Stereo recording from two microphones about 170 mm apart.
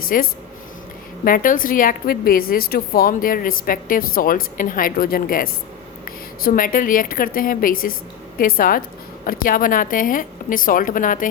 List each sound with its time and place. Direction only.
0.1 s a woman's voice: 55° left (ahead or behind)